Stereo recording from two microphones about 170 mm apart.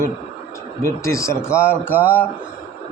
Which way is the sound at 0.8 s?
15° left (ahead or behind).